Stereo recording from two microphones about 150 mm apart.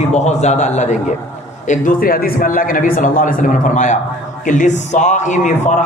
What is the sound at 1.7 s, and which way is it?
A man's voice, 70° left (ahead or behind).